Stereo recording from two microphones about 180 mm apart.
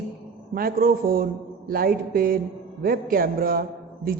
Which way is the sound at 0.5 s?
55° right (ahead or behind).